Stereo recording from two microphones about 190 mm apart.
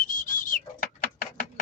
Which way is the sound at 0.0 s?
45° left (ahead or behind).